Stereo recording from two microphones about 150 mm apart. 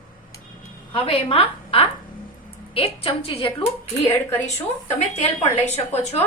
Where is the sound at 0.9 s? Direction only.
40° left (ahead or behind).